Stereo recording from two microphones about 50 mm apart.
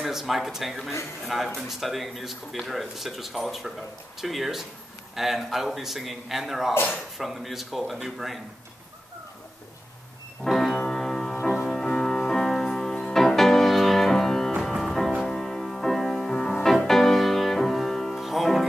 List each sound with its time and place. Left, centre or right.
0.0 s speech: centre
10.4 s music: centre
15.2 s music: centre